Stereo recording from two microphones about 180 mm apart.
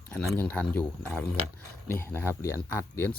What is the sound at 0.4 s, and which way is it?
Speech, 10° left (ahead or behind).